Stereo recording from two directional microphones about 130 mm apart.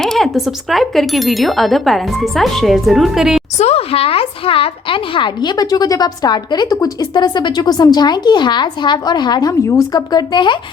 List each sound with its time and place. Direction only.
0.0 s speech: centre (ahead or behind)
3.6 s a woman's voice: 50° left (ahead or behind); by 10.6 s 35° left (ahead or behind)